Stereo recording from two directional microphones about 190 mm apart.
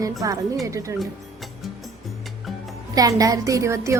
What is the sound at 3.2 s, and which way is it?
Speech, 15° right (ahead or behind).